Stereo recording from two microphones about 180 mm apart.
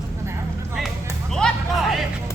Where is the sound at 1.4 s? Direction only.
Centre (ahead or behind).